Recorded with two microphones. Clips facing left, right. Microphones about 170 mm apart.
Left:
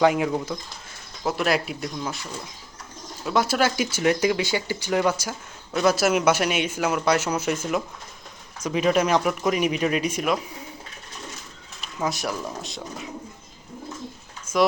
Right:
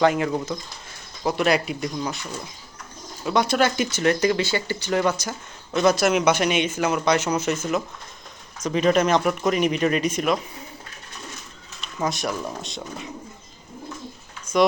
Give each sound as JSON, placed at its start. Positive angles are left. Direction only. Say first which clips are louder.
{"t": 0.0, "sound": "speech", "louder": "even", "side_deg": 10}
{"t": 11.8, "sound": "speech", "louder": "right 1 dB", "side_deg": 5}
{"t": 14.5, "sound": "a sound", "louder": "right 2 dB", "side_deg": 25}